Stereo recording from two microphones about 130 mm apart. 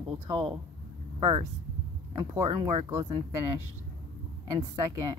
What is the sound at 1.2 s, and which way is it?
Speech, 40° right (ahead or behind).